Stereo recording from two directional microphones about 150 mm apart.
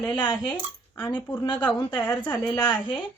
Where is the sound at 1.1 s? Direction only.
10° left (ahead or behind).